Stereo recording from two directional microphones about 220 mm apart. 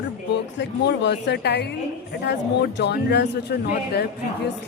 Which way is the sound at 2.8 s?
50° left (ahead or behind).